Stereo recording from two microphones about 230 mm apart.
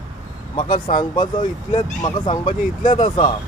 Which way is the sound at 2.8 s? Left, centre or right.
Left.